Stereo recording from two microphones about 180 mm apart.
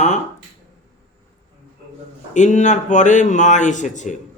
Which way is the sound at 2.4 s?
40° left (ahead or behind).